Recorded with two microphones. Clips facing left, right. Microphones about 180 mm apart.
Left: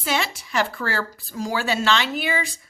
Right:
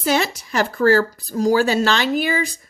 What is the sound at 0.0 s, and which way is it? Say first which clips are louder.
Speech: right 6 dB; 40° right (ahead or behind).